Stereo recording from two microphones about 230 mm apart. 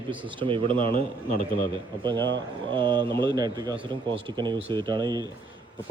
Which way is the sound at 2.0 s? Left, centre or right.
Right.